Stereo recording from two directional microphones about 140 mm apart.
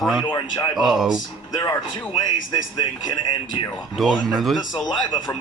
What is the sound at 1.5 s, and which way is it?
Speech, 25° left (ahead or behind).